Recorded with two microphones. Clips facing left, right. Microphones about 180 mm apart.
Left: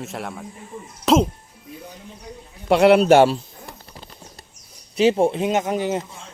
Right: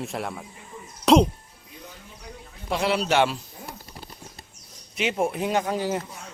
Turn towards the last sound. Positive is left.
turn(degrees=20)  # may be behind; listen again after turning